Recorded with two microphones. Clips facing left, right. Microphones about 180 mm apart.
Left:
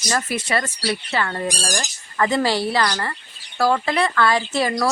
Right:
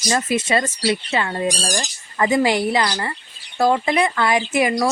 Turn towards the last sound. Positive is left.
turn(degrees=-15)  # may be behind; listen again after turning